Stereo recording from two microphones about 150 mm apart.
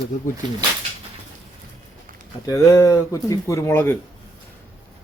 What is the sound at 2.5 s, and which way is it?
Speech, 20° left (ahead or behind).